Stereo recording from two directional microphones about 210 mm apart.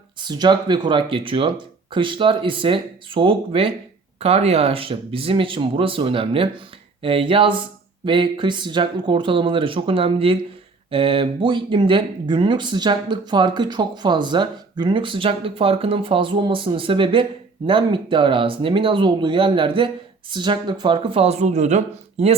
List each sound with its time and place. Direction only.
0.2 s speech: 20° right (ahead or behind)